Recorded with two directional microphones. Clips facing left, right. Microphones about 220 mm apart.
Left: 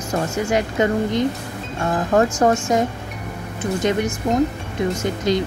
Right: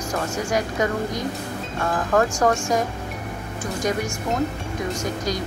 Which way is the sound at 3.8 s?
25° left (ahead or behind).